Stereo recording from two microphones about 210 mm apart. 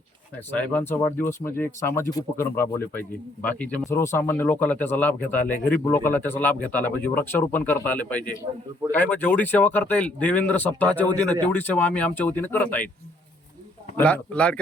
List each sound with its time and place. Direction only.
0.5 s a man's voice: 5° left (ahead or behind)
13.9 s a man's voice: 5° left (ahead or behind)